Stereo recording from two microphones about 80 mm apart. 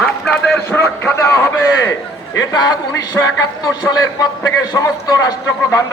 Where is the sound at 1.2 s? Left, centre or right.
Left.